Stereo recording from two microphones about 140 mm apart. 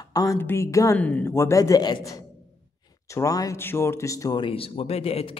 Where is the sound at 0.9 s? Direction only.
10° left (ahead or behind); by 5.4 s 45° left (ahead or behind).